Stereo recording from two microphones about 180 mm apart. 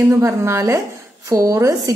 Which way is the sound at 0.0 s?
15° right (ahead or behind).